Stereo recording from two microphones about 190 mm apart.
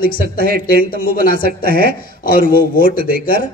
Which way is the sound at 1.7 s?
55° right (ahead or behind).